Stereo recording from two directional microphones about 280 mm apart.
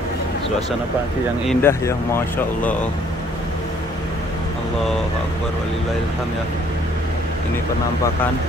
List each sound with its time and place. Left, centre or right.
1.5 s speech: centre